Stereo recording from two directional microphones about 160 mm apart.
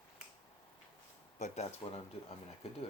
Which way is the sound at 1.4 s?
40° left (ahead or behind).